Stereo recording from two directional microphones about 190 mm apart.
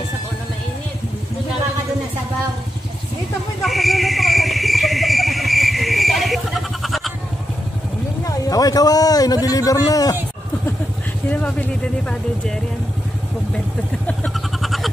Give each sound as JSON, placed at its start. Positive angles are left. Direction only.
{"t": 3.6, "sound": "vehicle", "side_deg": 0}
{"t": 8.3, "sound": "a man's voice", "side_deg": 20}
{"t": 11.2, "sound": "speech", "side_deg": 10}
{"t": 14.0, "sound": "a sound", "side_deg": 5}